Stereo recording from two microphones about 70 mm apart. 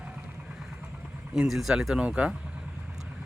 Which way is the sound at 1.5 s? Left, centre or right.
Centre.